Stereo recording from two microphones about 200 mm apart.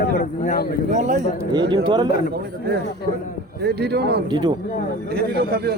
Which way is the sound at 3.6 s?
55° right (ahead or behind).